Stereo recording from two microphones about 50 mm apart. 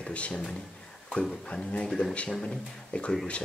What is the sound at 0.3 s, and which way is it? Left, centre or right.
Speech, centre.